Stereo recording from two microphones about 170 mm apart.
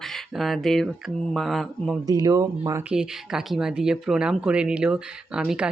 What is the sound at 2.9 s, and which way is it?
Speech, 5° right (ahead or behind).